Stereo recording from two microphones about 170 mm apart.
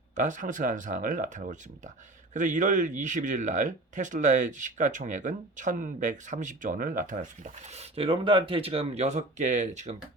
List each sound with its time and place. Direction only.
0.2 s speech: 45° right (ahead or behind)